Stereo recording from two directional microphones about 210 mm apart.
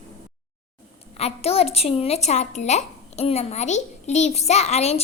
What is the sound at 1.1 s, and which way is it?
A woman's voice, 30° left (ahead or behind).